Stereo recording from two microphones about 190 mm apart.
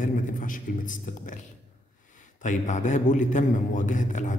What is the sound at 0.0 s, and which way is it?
Speech, 45° left (ahead or behind).